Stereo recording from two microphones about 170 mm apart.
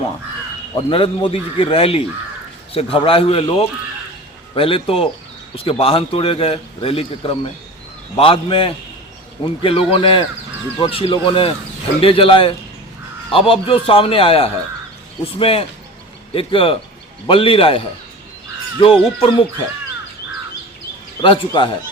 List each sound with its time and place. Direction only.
0.9 s a man's voice: 30° left (ahead or behind)
21.2 s speech: 30° left (ahead or behind)